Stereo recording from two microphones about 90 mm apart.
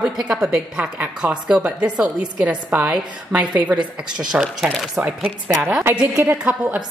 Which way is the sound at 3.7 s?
55° right (ahead or behind).